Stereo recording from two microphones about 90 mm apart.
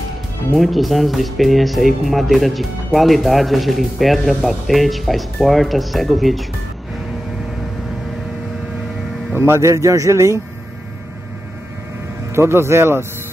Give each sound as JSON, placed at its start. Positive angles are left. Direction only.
{"t": 0.6, "sound": "speech", "side_deg": 0}
{"t": 9.3, "sound": "speech", "side_deg": -30}
{"t": 12.3, "sound": "speech", "side_deg": -30}